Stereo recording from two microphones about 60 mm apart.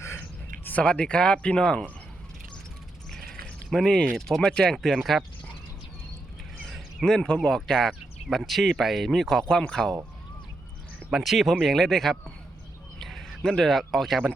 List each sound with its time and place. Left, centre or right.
0.2 s speech: left
3.7 s speech: centre
7.0 s speech: centre
11.1 s speech: centre